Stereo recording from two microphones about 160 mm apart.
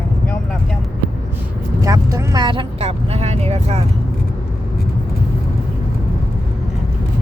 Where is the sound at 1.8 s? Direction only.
20° right (ahead or behind); by 3.8 s 40° right (ahead or behind).